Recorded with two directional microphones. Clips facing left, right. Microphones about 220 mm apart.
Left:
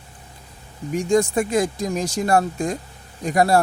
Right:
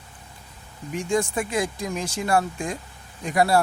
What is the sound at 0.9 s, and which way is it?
Speech, 40° left (ahead or behind).